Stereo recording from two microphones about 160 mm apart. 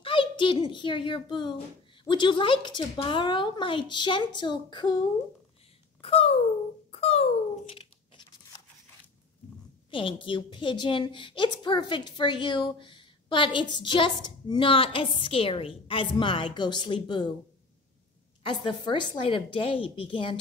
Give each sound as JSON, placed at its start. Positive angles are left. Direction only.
{"t": 0.0, "sound": "a child's voice", "side_deg": 35}
{"t": 5.9, "sound": "speech", "side_deg": 35}
{"t": 6.9, "sound": "a sound", "side_deg": 40}
{"t": 9.8, "sound": "a woman's voice", "side_deg": 30}
{"t": 18.4, "sound": "a woman's voice", "side_deg": 30}